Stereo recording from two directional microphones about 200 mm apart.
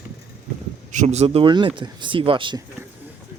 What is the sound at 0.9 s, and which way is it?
Speech, 35° right (ahead or behind).